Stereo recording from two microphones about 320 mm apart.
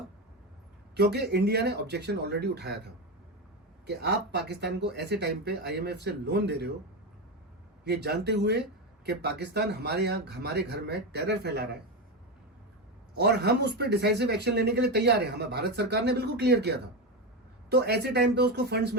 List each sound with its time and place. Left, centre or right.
0.9 s speech: right
3.8 s speech: right
7.9 s speech: right
13.1 s speech: right